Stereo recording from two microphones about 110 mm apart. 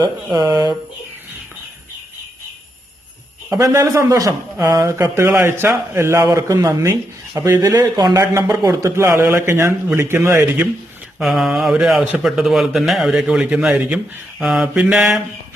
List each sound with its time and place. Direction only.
0.3 s speech: 35° right (ahead or behind)
3.6 s speech: 30° right (ahead or behind)
4.9 s a man's voice: 25° right (ahead or behind)
8.3 s a man's voice: 25° right (ahead or behind)
11.2 s a man's voice: centre (ahead or behind)